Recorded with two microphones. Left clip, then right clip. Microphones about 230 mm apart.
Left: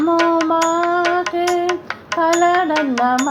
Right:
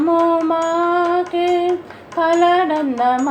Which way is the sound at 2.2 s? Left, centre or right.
Left.